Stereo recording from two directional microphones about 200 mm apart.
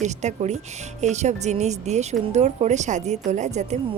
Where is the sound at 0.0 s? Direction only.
35° right (ahead or behind).